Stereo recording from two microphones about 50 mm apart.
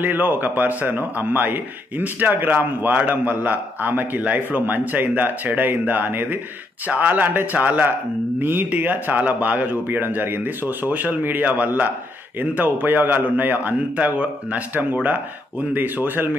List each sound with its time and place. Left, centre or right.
0.0 s speech: right
8.4 s speech: right